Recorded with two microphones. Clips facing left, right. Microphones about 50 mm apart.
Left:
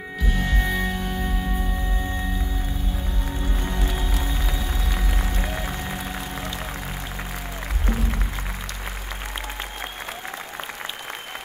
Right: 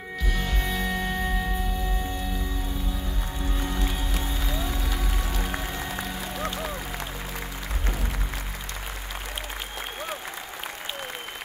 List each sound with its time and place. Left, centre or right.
0.4 s music: left